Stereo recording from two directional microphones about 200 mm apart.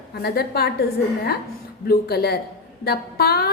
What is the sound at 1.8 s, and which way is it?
A woman's voice, 50° left (ahead or behind).